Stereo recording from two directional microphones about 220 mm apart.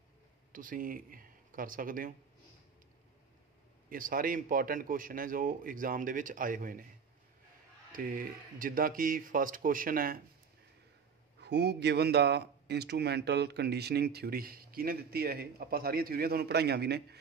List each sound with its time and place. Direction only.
0.5 s speech: 40° right (ahead or behind)
3.9 s a man's voice: 40° right (ahead or behind)
7.9 s a man's voice: 40° right (ahead or behind)
11.4 s a man's voice: 50° right (ahead or behind)